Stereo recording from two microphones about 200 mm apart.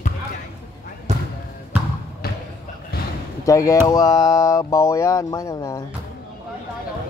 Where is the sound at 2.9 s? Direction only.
50° left (ahead or behind).